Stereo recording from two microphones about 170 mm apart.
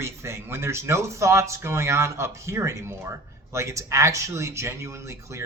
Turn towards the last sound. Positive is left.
turn(degrees=-15)  # may be behind; listen again after turning